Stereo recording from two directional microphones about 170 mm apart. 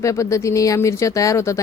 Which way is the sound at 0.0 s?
20° left (ahead or behind).